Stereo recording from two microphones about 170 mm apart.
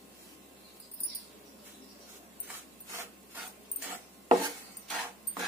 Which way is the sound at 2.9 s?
10° right (ahead or behind).